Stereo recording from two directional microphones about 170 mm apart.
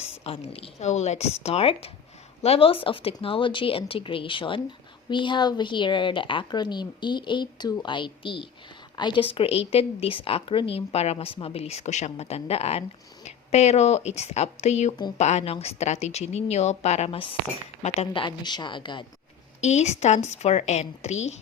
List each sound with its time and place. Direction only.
0.3 s a woman's voice: 35° left (ahead or behind)
19.6 s a woman's voice: 40° left (ahead or behind)